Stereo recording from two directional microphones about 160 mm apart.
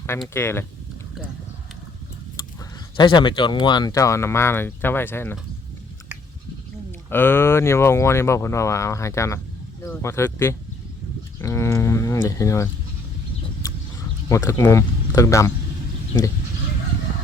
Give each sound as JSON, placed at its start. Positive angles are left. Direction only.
{"t": 0.3, "sound": "speech", "side_deg": 15}
{"t": 3.0, "sound": "speech", "side_deg": 30}
{"t": 7.1, "sound": "speech", "side_deg": 15}
{"t": 14.3, "sound": "speech", "side_deg": 20}